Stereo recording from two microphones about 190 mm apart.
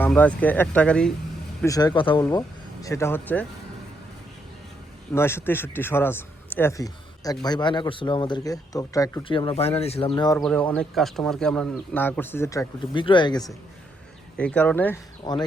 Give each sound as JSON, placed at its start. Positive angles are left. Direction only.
{"t": 0.0, "sound": "speech", "side_deg": 10}
{"t": 1.6, "sound": "a man's voice", "side_deg": 20}
{"t": 2.8, "sound": "speech", "side_deg": 15}
{"t": 5.1, "sound": "a man's voice", "side_deg": 10}
{"t": 10.3, "sound": "speech", "side_deg": 5}
{"t": 14.3, "sound": "speech", "side_deg": 5}
{"t": 15.2, "sound": "speech", "side_deg": 20}